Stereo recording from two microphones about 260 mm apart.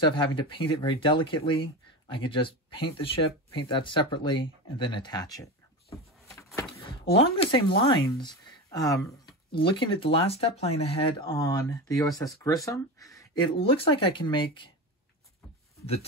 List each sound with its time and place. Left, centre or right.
0.0 s speech: centre
6.9 s speech: left